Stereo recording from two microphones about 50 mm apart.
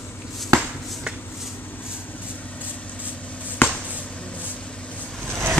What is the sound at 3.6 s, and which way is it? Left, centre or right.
Finger snapping, left.